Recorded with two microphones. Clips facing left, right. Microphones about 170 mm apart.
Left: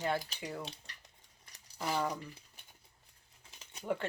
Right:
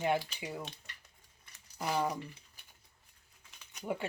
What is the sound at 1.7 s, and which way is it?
Speech, 5° right (ahead or behind).